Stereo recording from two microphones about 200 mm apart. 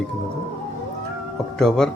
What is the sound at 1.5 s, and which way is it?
Speech, 5° left (ahead or behind).